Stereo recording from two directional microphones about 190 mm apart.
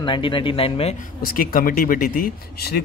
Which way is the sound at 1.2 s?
50° left (ahead or behind).